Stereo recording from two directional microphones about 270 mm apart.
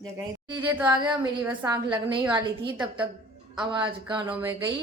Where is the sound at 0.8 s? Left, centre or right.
Centre.